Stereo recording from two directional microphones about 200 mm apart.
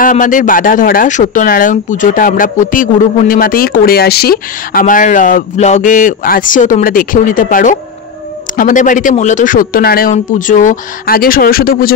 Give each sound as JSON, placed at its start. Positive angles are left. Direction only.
{"t": 0.0, "sound": "speech", "side_deg": 40}